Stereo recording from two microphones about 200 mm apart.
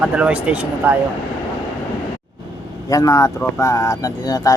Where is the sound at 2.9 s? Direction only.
15° left (ahead or behind).